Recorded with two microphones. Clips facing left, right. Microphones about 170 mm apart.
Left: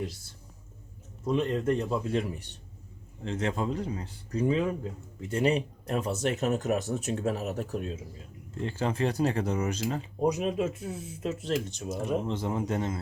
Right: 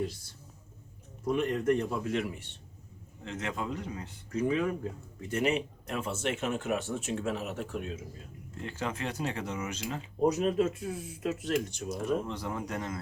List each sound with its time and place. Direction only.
1.3 s speech: 25° left (ahead or behind)
10.3 s speech: 15° left (ahead or behind)
10.8 s speech: 25° left (ahead or behind)